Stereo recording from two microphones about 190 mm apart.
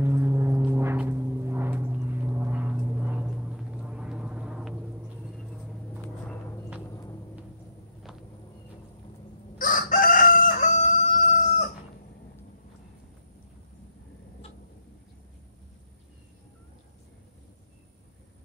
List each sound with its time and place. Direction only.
0.0 s gong: 10° right (ahead or behind)
6.9 s music: 20° left (ahead or behind)
9.6 s crowing: 45° left (ahead or behind)